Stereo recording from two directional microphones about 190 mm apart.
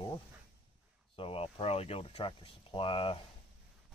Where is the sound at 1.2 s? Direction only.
30° left (ahead or behind).